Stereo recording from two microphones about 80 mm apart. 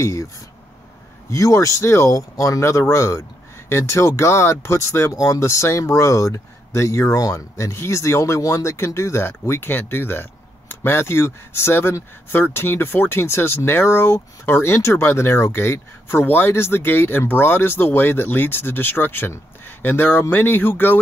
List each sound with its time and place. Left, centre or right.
0.0 s speech: left
1.3 s speech: left